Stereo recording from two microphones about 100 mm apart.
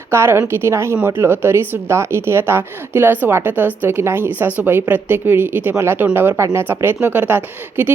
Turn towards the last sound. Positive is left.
turn(degrees=-20)  # may be behind; listen again after turning